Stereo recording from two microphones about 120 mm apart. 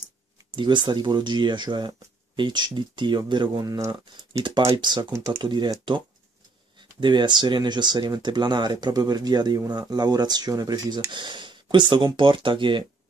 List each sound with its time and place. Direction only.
0.6 s speech: 40° right (ahead or behind)
5.1 s speech: 25° right (ahead or behind)
5.4 s speech: 40° right (ahead or behind)